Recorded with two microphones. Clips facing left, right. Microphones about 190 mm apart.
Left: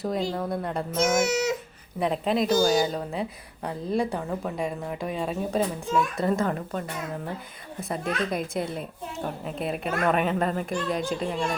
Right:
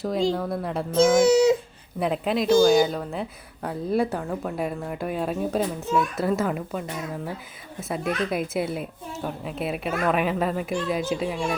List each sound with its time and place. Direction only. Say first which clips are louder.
0.0 s speech: right 3 dB; centre (ahead or behind)
1.2 s speech: right 8 dB; 30° right (ahead or behind)
2.0 s speech: even; centre (ahead or behind)